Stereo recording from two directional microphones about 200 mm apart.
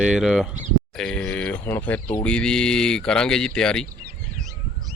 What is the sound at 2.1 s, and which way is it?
Speech, 5° left (ahead or behind).